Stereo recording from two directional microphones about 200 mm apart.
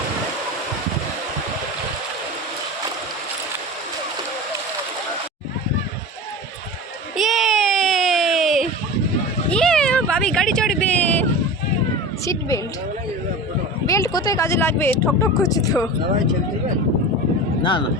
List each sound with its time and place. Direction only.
7.2 s a sound: centre (ahead or behind); by 12.5 s 15° left (ahead or behind)
13.8 s speech: 15° left (ahead or behind)
17.6 s speech: 25° left (ahead or behind)